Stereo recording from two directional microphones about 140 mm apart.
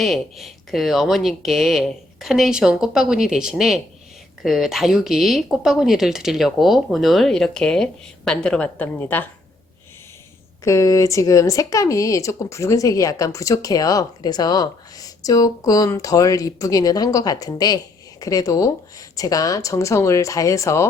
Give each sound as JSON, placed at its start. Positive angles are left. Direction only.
{"t": 0.0, "sound": "speech", "side_deg": 0}
{"t": 10.6, "sound": "speech", "side_deg": 25}